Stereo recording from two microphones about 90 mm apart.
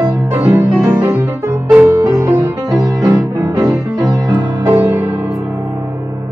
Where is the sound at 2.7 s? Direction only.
40° right (ahead or behind).